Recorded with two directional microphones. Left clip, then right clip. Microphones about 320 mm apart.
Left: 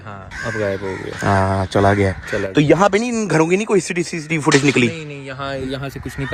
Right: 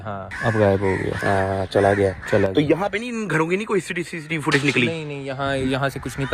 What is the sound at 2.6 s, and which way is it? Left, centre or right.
Speech, left.